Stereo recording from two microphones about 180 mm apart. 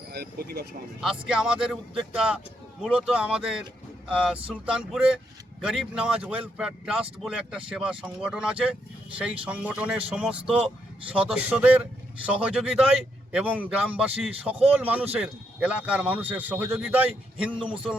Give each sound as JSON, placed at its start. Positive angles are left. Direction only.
{"t": 0.1, "sound": "a sound", "side_deg": -60}
{"t": 1.3, "sound": "speech", "side_deg": -5}
{"t": 17.5, "sound": "a man's voice", "side_deg": -30}